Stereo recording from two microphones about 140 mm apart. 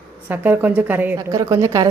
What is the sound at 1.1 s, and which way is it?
Speech, 25° right (ahead or behind).